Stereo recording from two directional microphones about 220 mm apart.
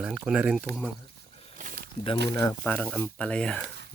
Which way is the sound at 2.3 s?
10° left (ahead or behind).